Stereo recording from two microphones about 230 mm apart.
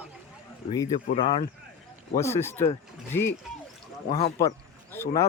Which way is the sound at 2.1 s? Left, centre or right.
Centre.